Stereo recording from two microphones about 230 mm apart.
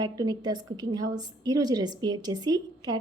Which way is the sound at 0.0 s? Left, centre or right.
Centre.